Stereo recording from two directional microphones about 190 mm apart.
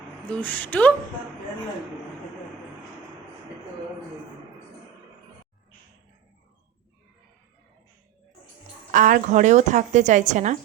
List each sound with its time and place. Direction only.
0.3 s speech: 10° left (ahead or behind)
8.9 s a woman's voice: 45° right (ahead or behind)